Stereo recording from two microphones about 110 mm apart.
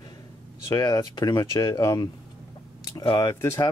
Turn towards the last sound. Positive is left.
turn(degrees=20)  # may be behind; listen again after turning